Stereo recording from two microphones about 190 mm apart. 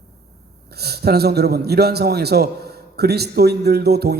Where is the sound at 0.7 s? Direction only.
55° right (ahead or behind).